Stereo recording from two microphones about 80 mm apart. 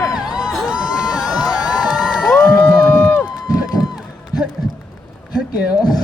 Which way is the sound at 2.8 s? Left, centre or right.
Centre.